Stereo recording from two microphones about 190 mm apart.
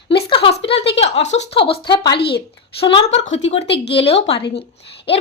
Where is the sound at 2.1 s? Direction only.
60° left (ahead or behind).